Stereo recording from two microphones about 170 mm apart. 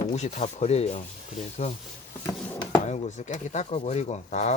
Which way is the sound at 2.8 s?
40° left (ahead or behind).